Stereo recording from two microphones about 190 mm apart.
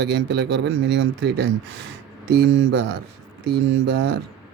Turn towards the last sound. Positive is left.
turn(degrees=-75)  # may be behind; listen again after turning